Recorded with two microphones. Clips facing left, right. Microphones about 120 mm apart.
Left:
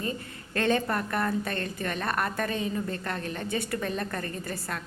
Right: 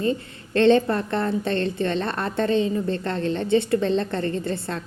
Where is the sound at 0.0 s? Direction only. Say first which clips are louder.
Right 9 dB; 25° right (ahead or behind).